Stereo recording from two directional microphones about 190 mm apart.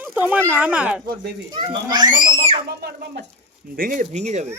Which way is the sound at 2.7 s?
60° right (ahead or behind).